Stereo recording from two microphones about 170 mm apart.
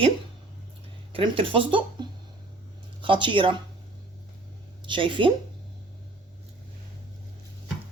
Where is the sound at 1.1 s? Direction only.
30° right (ahead or behind).